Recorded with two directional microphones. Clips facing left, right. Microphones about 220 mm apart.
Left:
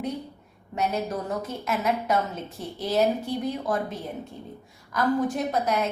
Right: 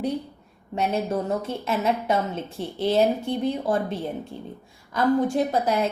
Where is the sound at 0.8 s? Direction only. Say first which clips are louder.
Right 3 dB; 25° right (ahead or behind).